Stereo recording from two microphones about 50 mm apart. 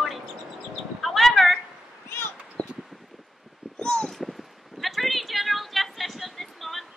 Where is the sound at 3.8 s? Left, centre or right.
Centre.